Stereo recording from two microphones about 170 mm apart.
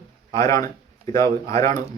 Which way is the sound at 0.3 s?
20° left (ahead or behind).